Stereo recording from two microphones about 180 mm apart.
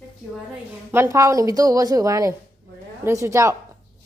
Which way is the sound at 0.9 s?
15° right (ahead or behind).